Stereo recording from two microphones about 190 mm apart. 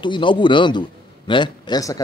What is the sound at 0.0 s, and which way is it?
A man's voice, 25° left (ahead or behind).